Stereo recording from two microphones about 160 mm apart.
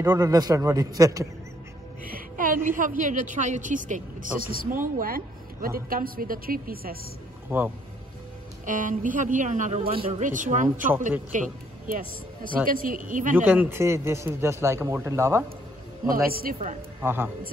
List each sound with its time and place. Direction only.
0.0 s a man's voice: 20° right (ahead or behind)
2.0 s a woman's voice: 60° right (ahead or behind)
7.5 s a man's voice: 15° right (ahead or behind)
8.6 s speech: 55° right (ahead or behind); by 10.2 s 35° right (ahead or behind)
10.2 s a woman's voice: 55° right (ahead or behind)
13.5 s a man's voice: 15° right (ahead or behind)
16.1 s a woman's voice: 65° right (ahead or behind)
17.0 s a man's voice: 15° right (ahead or behind)